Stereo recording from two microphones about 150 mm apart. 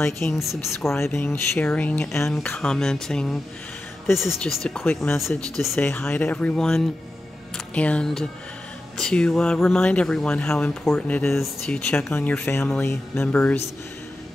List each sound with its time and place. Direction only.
0.0 s speech: 15° left (ahead or behind)